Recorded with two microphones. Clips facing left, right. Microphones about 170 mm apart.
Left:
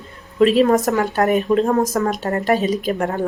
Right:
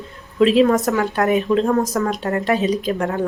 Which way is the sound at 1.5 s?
25° left (ahead or behind).